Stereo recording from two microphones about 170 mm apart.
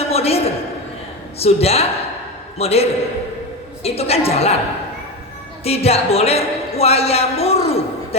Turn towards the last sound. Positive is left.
turn(degrees=35)  # may be behind; listen again after turning